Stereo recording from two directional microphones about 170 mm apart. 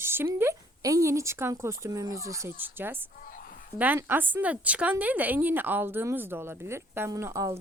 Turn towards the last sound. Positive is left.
turn(degrees=-20)  # may be behind; listen again after turning